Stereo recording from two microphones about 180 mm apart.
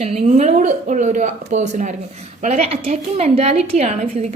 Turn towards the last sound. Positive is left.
turn(degrees=-35)  # may be behind; listen again after turning